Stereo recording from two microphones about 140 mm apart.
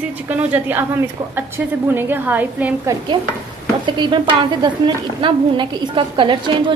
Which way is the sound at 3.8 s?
35° right (ahead or behind).